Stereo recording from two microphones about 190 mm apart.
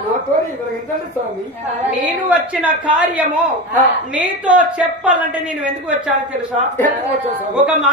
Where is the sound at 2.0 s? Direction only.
10° right (ahead or behind).